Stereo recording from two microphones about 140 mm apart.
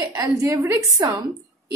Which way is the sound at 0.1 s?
25° right (ahead or behind).